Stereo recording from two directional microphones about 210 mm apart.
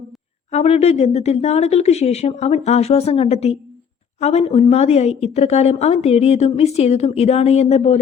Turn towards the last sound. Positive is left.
turn(degrees=30)  # may be behind; listen again after turning